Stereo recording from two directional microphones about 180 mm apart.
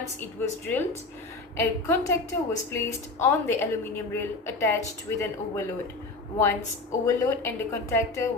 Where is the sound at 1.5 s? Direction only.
15° left (ahead or behind).